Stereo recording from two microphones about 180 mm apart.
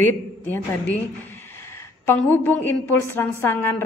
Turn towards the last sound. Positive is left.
turn(degrees=15)  # may be behind; listen again after turning